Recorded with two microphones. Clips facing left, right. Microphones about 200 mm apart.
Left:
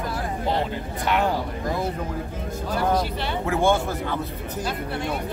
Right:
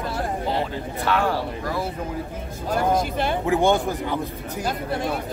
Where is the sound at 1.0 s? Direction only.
20° left (ahead or behind).